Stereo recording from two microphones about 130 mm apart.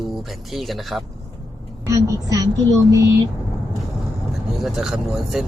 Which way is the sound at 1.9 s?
25° right (ahead or behind).